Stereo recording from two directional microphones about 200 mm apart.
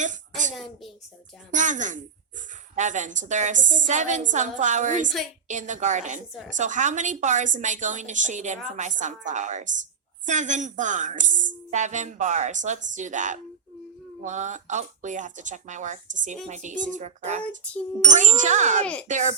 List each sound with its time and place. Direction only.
0.0 s a sound: 40° right (ahead or behind)
0.5 s a woman's voice: centre (ahead or behind)
1.5 s a woman's voice: 40° right (ahead or behind)